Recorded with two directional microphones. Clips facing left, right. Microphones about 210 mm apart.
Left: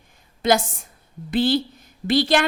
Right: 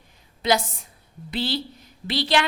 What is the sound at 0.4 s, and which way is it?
A woman's voice, 50° left (ahead or behind).